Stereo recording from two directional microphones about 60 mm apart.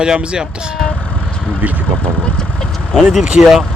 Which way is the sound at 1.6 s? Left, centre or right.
Right.